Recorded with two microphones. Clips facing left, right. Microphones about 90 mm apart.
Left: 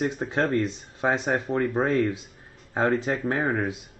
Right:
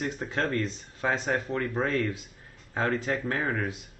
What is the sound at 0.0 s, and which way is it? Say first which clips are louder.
Speech: left 5 dB; 20° left (ahead or behind).